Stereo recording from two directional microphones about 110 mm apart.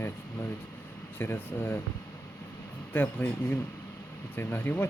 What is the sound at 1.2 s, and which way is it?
Speech, 20° left (ahead or behind).